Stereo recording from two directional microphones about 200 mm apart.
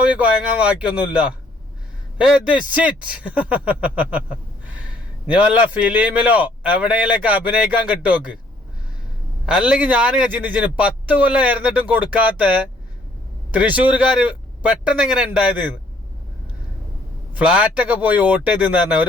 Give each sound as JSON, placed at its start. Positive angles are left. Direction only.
{"t": 0.0, "sound": "a man's voice", "side_deg": -5}
{"t": 9.5, "sound": "a man's voice", "side_deg": -5}
{"t": 13.5, "sound": "speech", "side_deg": -5}
{"t": 17.3, "sound": "a man's voice", "side_deg": -5}